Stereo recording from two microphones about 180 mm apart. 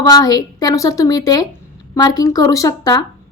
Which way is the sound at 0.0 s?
20° left (ahead or behind).